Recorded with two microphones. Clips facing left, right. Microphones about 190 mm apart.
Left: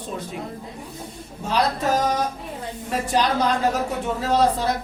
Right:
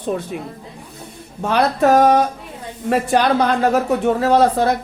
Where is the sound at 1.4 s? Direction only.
60° right (ahead or behind).